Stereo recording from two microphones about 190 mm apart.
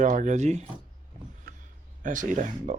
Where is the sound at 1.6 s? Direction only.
40° right (ahead or behind).